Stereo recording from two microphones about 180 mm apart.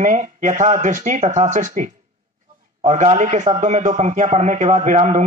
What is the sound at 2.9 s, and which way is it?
A man's voice, 40° right (ahead or behind).